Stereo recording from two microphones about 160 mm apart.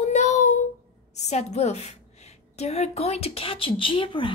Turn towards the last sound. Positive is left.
turn(degrees=35)  # may be behind; listen again after turning